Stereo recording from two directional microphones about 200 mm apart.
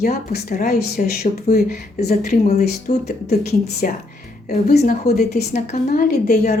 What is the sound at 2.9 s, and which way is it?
A woman's voice, 35° left (ahead or behind).